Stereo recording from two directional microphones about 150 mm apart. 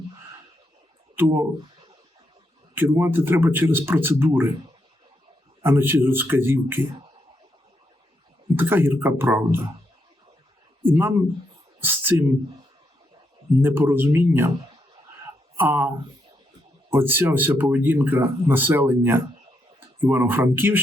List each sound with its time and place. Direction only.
1.1 s speech: 15° right (ahead or behind)
2.7 s speech: 15° right (ahead or behind)
5.6 s speech: 15° right (ahead or behind)
8.5 s speech: 15° right (ahead or behind)
10.8 s speech: 15° right (ahead or behind)
13.6 s speech: 15° right (ahead or behind)
15.5 s speech: 15° right (ahead or behind)
16.9 s speech: 15° right (ahead or behind)